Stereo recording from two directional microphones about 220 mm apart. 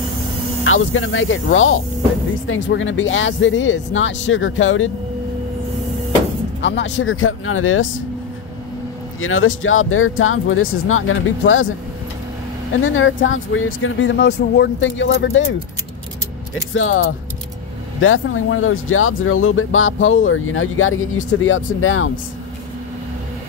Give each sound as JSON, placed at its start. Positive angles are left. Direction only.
{"t": 0.7, "sound": "speech", "side_deg": 65}
{"t": 6.6, "sound": "speech", "side_deg": 55}
{"t": 9.2, "sound": "speech", "side_deg": 65}
{"t": 12.8, "sound": "speech", "side_deg": 65}
{"t": 16.7, "sound": "speech", "side_deg": 65}